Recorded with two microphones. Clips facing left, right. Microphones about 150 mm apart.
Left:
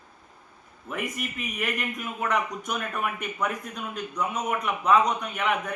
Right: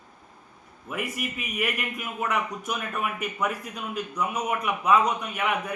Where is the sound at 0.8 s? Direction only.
5° right (ahead or behind).